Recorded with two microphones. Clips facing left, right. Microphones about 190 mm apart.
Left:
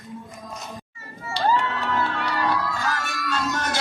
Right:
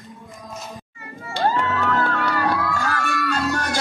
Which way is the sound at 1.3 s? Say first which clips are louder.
Right 1 dB; 50° right (ahead or behind).